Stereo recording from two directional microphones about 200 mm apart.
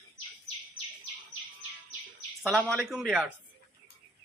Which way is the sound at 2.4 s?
5° left (ahead or behind).